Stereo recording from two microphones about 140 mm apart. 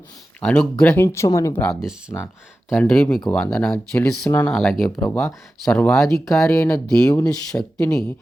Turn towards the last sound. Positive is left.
turn(degrees=20)  # may be behind; listen again after turning